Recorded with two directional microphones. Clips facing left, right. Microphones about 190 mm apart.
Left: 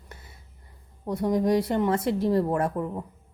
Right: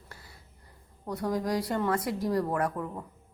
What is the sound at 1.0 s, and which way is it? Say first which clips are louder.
A woman's voice: left 6 dB; 20° left (ahead or behind).